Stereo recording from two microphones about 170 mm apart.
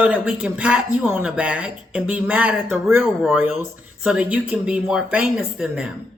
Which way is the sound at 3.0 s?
Centre (ahead or behind).